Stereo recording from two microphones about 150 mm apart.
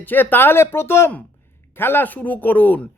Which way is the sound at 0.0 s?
10° left (ahead or behind).